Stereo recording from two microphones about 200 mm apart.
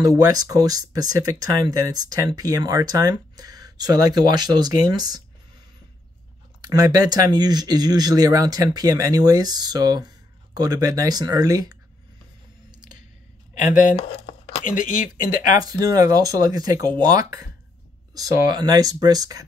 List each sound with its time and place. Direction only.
0.0 s speech: 20° right (ahead or behind)
6.6 s speech: 20° right (ahead or behind)
13.6 s speech: 40° left (ahead or behind)
15.6 s speech: 20° right (ahead or behind)